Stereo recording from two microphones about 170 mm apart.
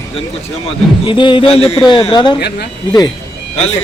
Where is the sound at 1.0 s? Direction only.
30° left (ahead or behind).